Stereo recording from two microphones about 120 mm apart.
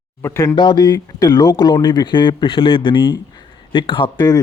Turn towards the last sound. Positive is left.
turn(degrees=35)  # may be behind; listen again after turning